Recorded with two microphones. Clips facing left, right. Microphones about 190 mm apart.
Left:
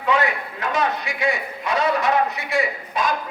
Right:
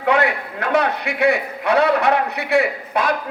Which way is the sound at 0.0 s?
65° right (ahead or behind).